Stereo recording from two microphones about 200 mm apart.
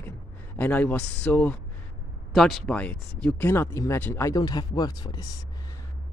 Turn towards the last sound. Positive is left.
turn(degrees=20)  # may be behind; listen again after turning